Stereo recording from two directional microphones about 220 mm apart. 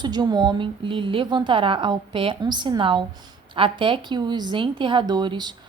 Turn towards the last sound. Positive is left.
turn(degrees=-20)  # may be behind; listen again after turning